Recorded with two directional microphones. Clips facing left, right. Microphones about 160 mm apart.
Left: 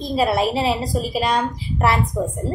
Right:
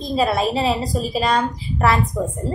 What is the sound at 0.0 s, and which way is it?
A woman's voice, 10° left (ahead or behind).